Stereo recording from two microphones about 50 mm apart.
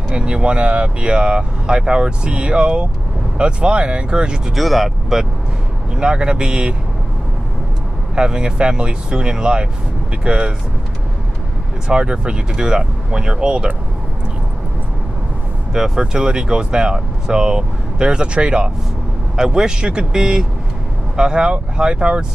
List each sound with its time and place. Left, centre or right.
0.1 s speech: centre
4.6 s speech: centre
5.9 s speech: centre
8.2 s speech: centre
11.9 s speech: centre
15.7 s speech: centre